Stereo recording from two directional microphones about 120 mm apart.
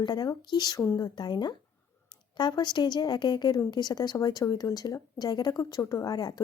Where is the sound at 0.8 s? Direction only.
25° left (ahead or behind).